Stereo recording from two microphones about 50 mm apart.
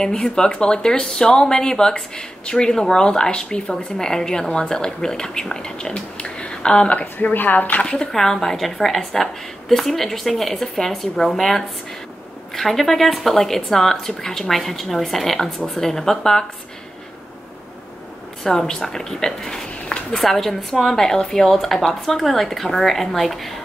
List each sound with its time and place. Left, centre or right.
0.0 s speech: centre
7.0 s speech: left
7.8 s speech: left
8.1 s a woman's voice: centre
18.4 s a woman's voice: centre